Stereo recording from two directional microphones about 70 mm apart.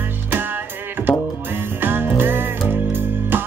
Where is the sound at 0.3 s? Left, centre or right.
Right.